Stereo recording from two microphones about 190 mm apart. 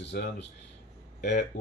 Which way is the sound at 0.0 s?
65° left (ahead or behind).